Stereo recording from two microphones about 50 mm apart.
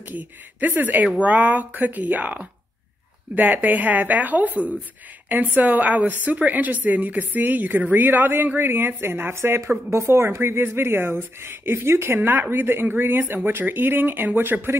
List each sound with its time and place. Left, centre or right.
0.1 s a woman's voice: right
9.4 s speech: right